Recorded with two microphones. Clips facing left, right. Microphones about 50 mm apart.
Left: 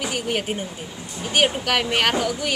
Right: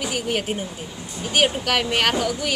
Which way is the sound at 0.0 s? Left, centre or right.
Centre.